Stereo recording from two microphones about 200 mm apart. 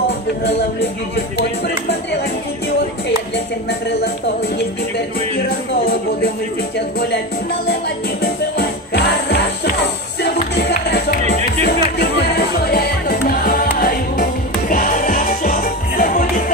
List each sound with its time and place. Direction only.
8.2 s music: 50° left (ahead or behind)